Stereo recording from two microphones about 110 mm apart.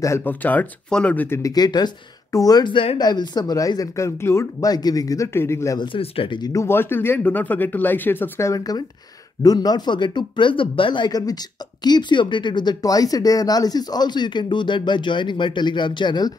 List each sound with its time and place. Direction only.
0.2 s speech: 15° left (ahead or behind)
1.4 s speech: 35° left (ahead or behind)
3.0 s speech: 40° left (ahead or behind)
5.8 s speech: 55° left (ahead or behind)
6.5 s speech: 25° left (ahead or behind); by 16.3 s 40° left (ahead or behind)